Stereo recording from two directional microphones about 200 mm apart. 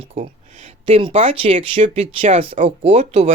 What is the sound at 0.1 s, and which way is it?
Speech, 35° right (ahead or behind).